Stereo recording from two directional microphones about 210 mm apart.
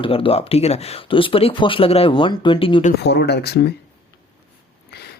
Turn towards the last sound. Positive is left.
turn(degrees=50)  # may be behind; listen again after turning